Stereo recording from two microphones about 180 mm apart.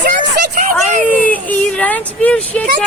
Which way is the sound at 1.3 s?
10° left (ahead or behind).